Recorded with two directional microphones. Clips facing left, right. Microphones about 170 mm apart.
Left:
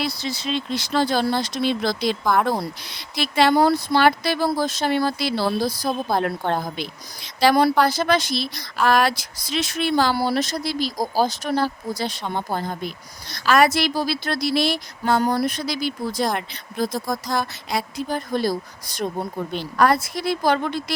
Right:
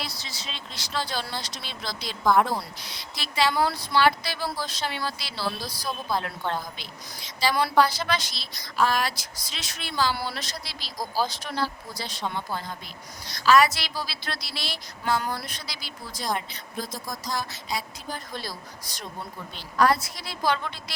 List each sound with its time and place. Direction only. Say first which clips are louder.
0.0 s speech: left 11 dB; 60° left (ahead or behind)
2.2 s speech: right 1 dB; centre (ahead or behind)
2.5 s speech: left 7 dB; 55° left (ahead or behind)
3.5 s speech: left 7 dB; 45° left (ahead or behind); by 7.5 s 65° left (ahead or behind)
7.5 s speech: left 1 dB; 50° left (ahead or behind)
10.2 s speech: left 11 dB; 45° left (ahead or behind)